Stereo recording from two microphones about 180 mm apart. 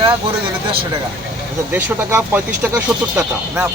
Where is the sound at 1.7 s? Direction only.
10° right (ahead or behind).